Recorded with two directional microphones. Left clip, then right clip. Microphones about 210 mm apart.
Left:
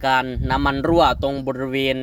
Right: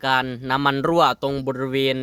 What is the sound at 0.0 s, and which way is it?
Speech, 15° right (ahead or behind).